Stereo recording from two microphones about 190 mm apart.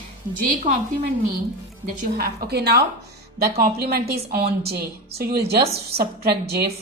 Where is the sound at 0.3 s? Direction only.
45° right (ahead or behind).